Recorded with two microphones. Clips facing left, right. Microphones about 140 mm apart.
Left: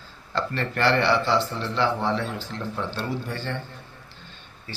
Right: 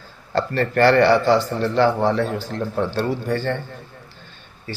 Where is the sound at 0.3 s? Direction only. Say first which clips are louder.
Right 8 dB; 45° right (ahead or behind).